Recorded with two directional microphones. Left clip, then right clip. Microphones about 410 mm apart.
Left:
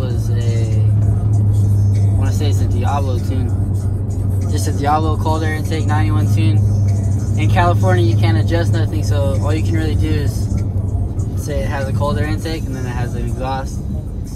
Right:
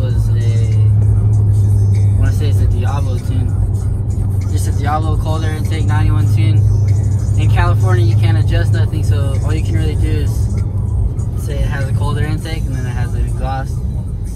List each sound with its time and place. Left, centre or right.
4.8 s speech: centre
11.7 s speech: centre